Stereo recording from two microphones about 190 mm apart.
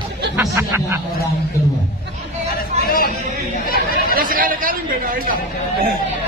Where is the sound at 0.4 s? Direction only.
15° right (ahead or behind).